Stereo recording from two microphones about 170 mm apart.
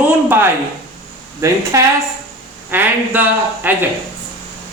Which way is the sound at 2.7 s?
10° right (ahead or behind).